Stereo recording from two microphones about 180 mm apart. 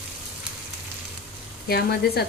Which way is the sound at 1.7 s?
60° left (ahead or behind).